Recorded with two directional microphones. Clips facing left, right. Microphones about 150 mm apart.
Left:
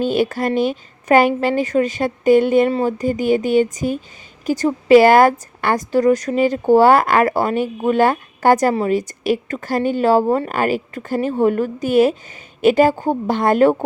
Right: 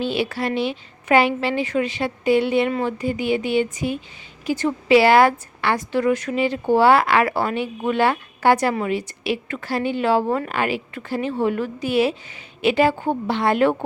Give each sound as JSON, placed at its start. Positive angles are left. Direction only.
{"t": 0.0, "sound": "speech", "side_deg": 45}